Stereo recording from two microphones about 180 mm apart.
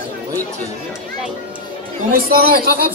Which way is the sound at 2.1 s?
55° right (ahead or behind).